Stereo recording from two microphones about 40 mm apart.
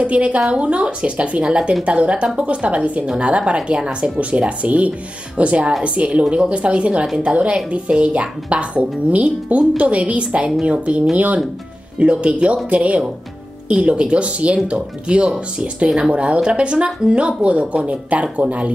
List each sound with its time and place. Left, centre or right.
0.0 s speech: right
11.1 s speech: right